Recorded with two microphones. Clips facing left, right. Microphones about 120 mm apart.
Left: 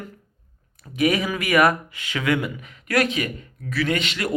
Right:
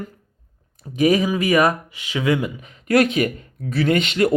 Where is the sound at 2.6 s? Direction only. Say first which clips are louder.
Right 5 dB; 30° right (ahead or behind).